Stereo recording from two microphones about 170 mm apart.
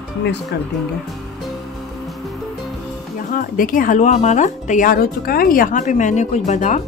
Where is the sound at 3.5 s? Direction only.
55° left (ahead or behind).